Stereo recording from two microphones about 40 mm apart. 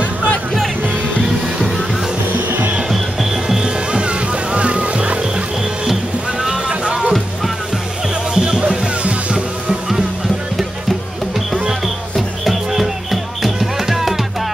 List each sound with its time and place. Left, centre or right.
3.4 s music: centre
6.5 s boat: right
8.4 s music: right
11.8 s music: centre